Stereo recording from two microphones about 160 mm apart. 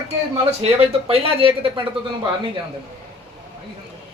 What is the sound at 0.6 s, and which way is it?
Speech, 40° right (ahead or behind).